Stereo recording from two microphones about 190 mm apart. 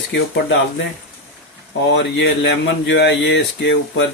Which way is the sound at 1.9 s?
70° left (ahead or behind).